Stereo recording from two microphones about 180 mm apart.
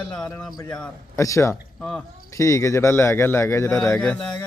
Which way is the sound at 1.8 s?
5° left (ahead or behind).